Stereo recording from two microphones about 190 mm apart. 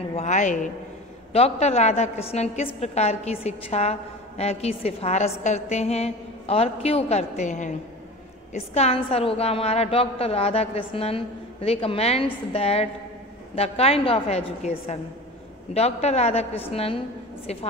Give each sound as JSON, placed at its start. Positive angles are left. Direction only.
{"t": 0.1, "sound": "a woman's voice", "side_deg": 35}